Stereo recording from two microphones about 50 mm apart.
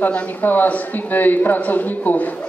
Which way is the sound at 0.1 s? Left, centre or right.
Left.